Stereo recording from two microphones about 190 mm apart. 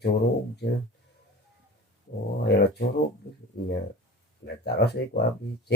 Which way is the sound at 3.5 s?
55° left (ahead or behind).